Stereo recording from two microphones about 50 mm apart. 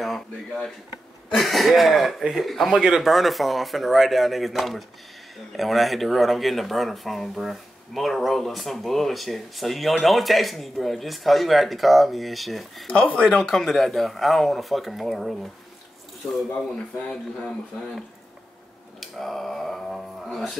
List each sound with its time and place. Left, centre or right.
1.3 s speech: centre
12.9 s speech: left
13.2 s speech: centre
18.9 s speech: centre